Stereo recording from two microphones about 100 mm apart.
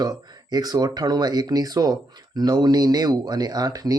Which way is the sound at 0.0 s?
40° right (ahead or behind).